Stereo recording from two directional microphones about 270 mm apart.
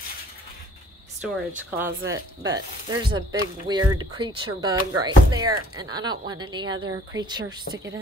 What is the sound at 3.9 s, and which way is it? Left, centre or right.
Speech, centre.